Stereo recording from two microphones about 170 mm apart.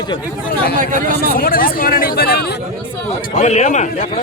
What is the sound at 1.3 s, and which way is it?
Speech, 60° left (ahead or behind).